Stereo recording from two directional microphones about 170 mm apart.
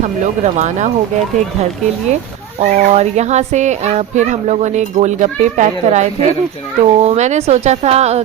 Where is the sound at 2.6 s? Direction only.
40° right (ahead or behind).